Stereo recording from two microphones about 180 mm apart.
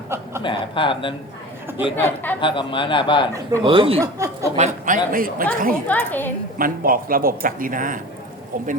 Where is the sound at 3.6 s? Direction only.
30° right (ahead or behind).